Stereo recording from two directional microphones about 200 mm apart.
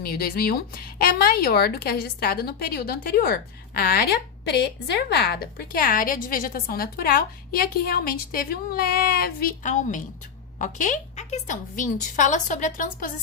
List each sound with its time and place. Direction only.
0.0 s a woman's voice: 50° left (ahead or behind)